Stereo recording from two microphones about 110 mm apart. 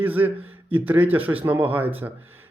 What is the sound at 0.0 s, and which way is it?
A man's voice, 15° right (ahead or behind).